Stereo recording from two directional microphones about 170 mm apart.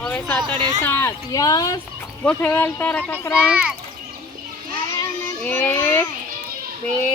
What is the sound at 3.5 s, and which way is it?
Speech, 5° right (ahead or behind).